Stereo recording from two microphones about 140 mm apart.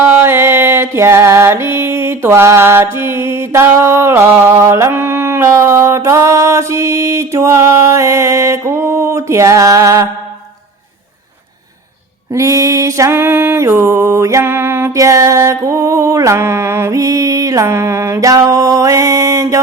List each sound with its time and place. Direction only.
0.0 s music: 15° right (ahead or behind)
12.3 s music: 25° right (ahead or behind)